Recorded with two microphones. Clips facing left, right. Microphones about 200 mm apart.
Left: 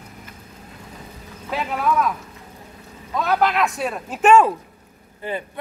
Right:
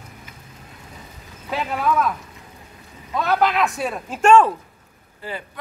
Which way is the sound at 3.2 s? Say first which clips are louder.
Even; centre (ahead or behind).